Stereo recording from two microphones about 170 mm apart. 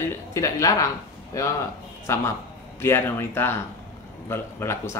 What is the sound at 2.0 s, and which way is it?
A man's voice, 15° left (ahead or behind).